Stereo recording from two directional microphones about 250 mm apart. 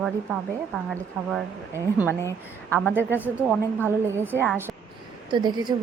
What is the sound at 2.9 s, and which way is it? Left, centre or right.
A woman's voice, centre.